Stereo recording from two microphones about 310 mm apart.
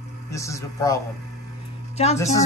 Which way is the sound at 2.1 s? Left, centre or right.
Centre.